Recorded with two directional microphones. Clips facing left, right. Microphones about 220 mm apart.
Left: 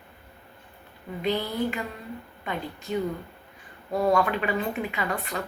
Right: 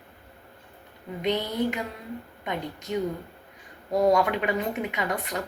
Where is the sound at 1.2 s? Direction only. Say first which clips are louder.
Even; 20° right (ahead or behind).